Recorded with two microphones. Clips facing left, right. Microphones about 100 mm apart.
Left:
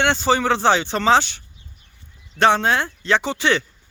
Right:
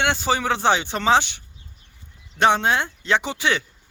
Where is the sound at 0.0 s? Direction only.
10° right (ahead or behind).